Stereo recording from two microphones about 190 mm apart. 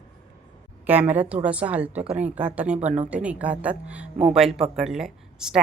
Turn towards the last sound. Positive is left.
turn(degrees=-5)  # may be behind; listen again after turning